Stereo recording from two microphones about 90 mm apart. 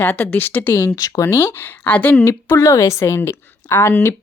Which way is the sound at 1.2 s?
30° left (ahead or behind).